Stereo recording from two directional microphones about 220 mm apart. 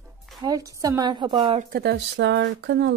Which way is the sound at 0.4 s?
15° right (ahead or behind).